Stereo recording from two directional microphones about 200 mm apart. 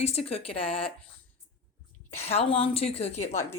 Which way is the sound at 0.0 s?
30° left (ahead or behind).